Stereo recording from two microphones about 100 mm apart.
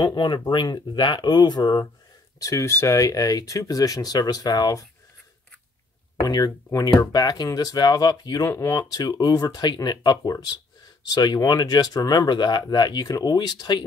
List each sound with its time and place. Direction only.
0.0 s speech: 50° left (ahead or behind)
2.4 s speech: 30° left (ahead or behind)
6.2 s speech: 40° left (ahead or behind)